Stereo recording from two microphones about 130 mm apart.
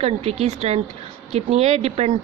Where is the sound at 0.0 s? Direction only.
55° right (ahead or behind).